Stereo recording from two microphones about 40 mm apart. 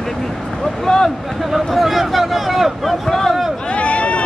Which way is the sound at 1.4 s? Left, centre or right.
Centre.